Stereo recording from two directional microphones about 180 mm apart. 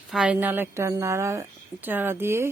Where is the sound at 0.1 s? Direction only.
5° right (ahead or behind).